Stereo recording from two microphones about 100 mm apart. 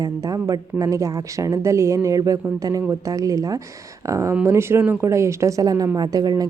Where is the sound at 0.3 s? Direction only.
35° right (ahead or behind).